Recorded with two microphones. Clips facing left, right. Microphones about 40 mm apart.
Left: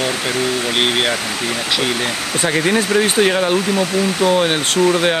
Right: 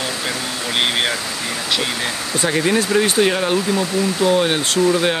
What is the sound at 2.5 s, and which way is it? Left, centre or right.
Speech, centre.